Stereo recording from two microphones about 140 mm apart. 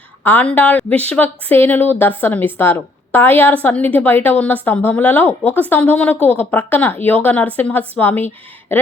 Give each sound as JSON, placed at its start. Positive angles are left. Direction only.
{"t": 0.3, "sound": "a woman's voice", "side_deg": 10}